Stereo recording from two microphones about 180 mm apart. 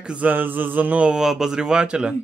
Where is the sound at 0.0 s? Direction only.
5° right (ahead or behind).